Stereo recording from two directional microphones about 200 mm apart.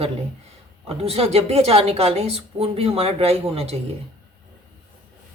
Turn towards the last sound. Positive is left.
turn(degrees=-30)  # may be behind; listen again after turning